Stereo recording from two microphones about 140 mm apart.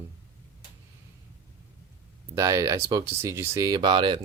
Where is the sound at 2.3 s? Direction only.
25° right (ahead or behind).